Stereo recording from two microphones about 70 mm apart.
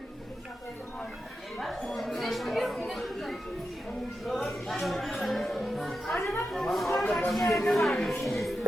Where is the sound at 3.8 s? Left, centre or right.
Centre.